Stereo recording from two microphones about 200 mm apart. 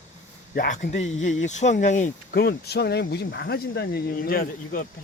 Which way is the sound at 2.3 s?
50° left (ahead or behind).